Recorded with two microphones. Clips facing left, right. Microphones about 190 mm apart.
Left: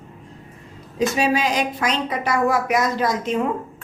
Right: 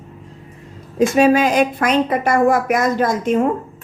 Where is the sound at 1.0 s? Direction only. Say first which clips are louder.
Right 7 dB; 50° right (ahead or behind).